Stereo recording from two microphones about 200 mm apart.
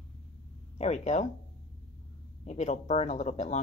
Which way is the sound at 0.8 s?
35° left (ahead or behind).